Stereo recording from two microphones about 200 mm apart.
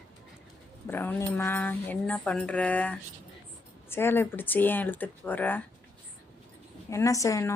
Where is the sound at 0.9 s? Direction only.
10° left (ahead or behind).